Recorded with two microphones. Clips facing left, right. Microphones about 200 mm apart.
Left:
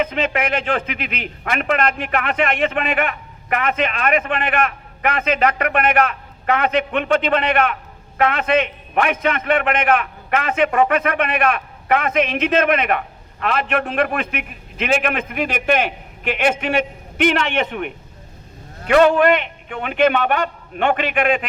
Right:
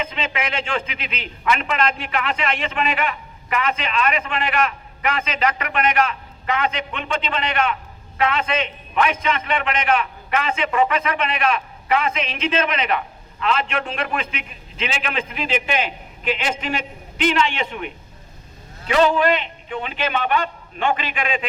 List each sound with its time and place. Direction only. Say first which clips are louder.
0.0 s a man's voice: left 6 dB; 60° left (ahead or behind)